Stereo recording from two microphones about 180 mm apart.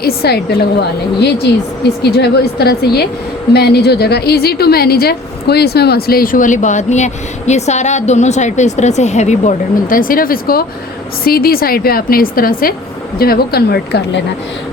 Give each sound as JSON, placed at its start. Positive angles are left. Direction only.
{"t": 0.0, "sound": "a woman's voice", "side_deg": 60}